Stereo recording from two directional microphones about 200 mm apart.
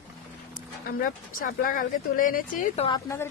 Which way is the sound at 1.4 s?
45° left (ahead or behind).